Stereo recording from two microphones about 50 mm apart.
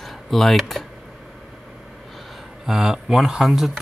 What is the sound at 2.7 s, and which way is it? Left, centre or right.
Speech, centre.